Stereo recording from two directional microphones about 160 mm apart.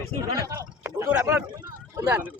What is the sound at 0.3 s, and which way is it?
Speech, 20° right (ahead or behind).